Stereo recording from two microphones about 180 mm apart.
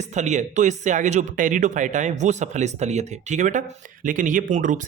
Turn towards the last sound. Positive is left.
turn(degrees=-45)  # may be behind; listen again after turning